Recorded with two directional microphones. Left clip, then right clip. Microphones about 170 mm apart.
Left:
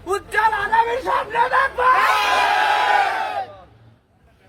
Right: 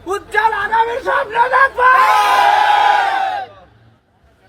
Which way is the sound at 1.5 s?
Centre (ahead or behind).